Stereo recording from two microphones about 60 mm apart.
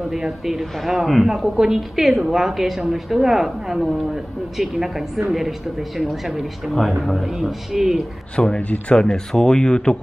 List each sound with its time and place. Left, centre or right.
0.1 s a woman's voice: centre
8.4 s speech: centre